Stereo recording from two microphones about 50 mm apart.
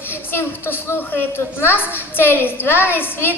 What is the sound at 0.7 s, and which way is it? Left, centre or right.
A woman's voice, left.